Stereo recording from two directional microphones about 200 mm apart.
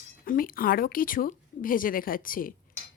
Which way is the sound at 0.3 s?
45° left (ahead or behind).